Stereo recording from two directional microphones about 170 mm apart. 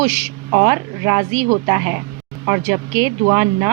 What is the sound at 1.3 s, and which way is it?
Speech, 45° right (ahead or behind).